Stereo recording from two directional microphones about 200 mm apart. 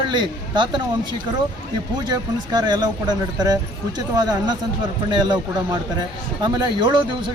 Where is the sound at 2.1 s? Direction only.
20° right (ahead or behind).